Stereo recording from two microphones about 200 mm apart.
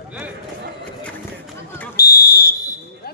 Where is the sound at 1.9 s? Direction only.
50° left (ahead or behind).